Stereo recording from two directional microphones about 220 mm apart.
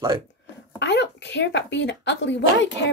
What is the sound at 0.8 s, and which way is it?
A woman's voice, 50° left (ahead or behind).